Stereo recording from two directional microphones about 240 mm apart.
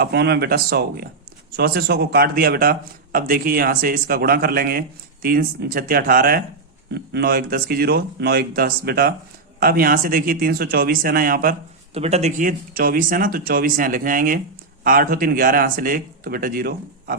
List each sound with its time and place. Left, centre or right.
0.0 s speech: right
11.9 s speech: right